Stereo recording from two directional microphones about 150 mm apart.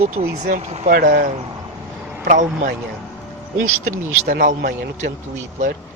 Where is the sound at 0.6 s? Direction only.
45° right (ahead or behind).